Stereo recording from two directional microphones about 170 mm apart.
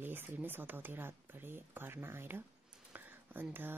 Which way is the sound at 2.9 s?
10° right (ahead or behind).